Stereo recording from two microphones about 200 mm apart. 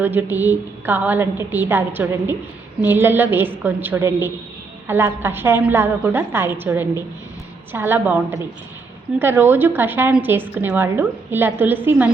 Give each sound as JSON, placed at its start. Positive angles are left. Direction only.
{"t": 0.0, "sound": "a woman's voice", "side_deg": -10}